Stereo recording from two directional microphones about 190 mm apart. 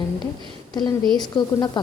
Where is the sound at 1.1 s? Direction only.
20° left (ahead or behind).